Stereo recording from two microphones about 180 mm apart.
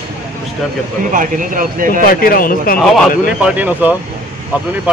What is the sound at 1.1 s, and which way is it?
Speech, 50° right (ahead or behind).